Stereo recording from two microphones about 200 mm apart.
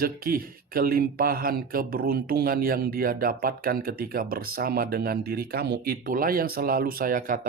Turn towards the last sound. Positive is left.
turn(degrees=-45)  # may be behind; listen again after turning